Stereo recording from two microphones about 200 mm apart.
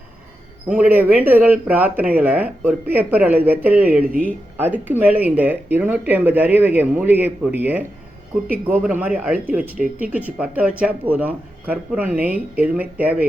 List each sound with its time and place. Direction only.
0.7 s speech: 10° right (ahead or behind)